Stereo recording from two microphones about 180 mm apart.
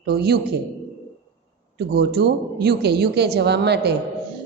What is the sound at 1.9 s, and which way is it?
A woman's voice, 60° right (ahead or behind).